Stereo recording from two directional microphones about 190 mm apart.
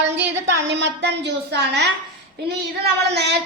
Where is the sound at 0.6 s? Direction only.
65° right (ahead or behind).